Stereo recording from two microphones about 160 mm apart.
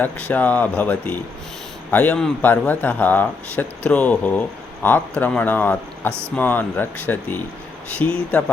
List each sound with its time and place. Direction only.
0.0 s speech: 10° left (ahead or behind)